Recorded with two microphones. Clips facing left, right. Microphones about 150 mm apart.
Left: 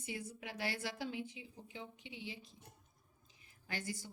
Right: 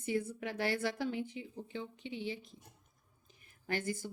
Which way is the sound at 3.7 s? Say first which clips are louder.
Right 7 dB; 55° right (ahead or behind).